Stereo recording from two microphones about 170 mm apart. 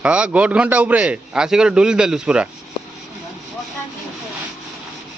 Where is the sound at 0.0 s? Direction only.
5° right (ahead or behind).